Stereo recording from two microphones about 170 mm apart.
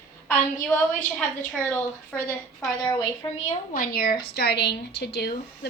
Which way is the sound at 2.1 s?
10° left (ahead or behind).